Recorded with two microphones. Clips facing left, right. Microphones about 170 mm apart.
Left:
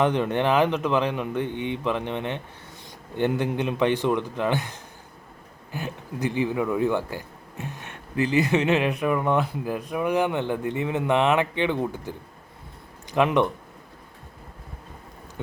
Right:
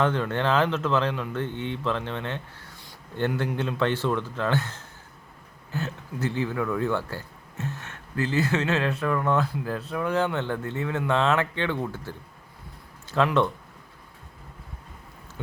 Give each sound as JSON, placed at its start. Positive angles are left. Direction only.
{"t": 0.0, "sound": "speech", "side_deg": 15}